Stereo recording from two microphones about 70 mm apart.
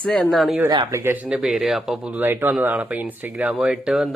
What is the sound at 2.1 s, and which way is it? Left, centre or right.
Speech, right.